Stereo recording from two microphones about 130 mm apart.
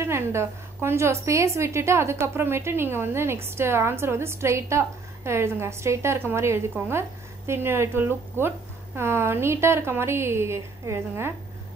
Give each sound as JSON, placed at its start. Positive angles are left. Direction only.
{"t": 0.0, "sound": "a woman's voice", "side_deg": -20}